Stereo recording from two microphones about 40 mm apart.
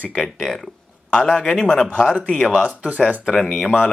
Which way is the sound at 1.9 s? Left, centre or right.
Centre.